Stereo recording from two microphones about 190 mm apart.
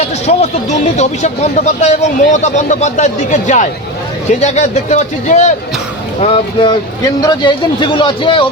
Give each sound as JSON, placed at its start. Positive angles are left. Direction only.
{"t": 0.3, "sound": "speech", "side_deg": 35}